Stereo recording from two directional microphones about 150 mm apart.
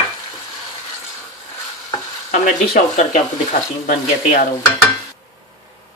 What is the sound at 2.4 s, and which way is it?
Speech, 60° left (ahead or behind).